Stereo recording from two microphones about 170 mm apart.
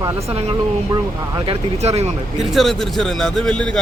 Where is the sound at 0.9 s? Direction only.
30° right (ahead or behind).